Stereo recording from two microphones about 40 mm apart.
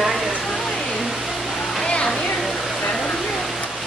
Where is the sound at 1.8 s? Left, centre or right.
Centre.